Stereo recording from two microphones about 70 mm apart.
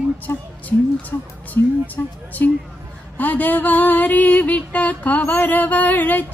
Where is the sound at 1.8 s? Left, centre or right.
Left.